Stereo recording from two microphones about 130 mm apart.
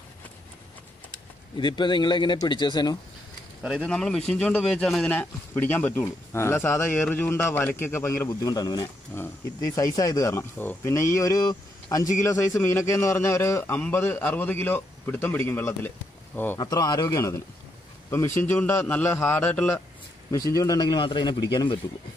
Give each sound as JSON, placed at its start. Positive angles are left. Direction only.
{"t": 1.6, "sound": "a man's voice", "side_deg": 35}
{"t": 3.8, "sound": "a man's voice", "side_deg": 5}
{"t": 9.9, "sound": "speech", "side_deg": 25}
{"t": 16.5, "sound": "speech", "side_deg": 30}
{"t": 20.2, "sound": "a man's voice", "side_deg": 25}